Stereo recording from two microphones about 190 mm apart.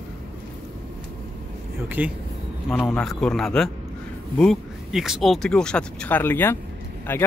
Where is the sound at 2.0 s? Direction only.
10° right (ahead or behind).